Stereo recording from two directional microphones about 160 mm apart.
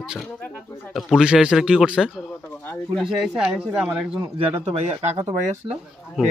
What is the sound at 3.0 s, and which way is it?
A man's voice, centre (ahead or behind).